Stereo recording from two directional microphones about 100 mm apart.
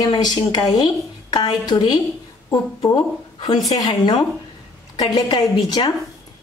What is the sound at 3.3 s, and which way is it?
A woman's voice, 50° left (ahead or behind).